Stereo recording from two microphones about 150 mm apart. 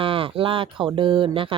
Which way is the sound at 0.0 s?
35° right (ahead or behind).